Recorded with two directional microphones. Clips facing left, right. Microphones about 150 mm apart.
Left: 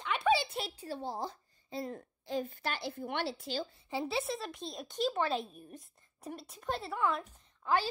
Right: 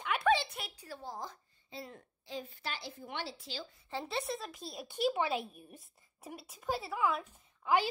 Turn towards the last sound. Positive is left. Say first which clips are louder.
# right 1 dB
turn(degrees=-10)  # may be behind; listen again after turning